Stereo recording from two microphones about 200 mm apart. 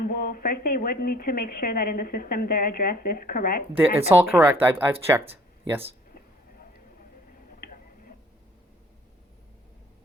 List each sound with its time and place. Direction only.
0.0 s speech: 45° left (ahead or behind)
4.1 s speech: 10° right (ahead or behind)
5.3 s a sound: 10° right (ahead or behind)
7.6 s tick-tock: 45° left (ahead or behind)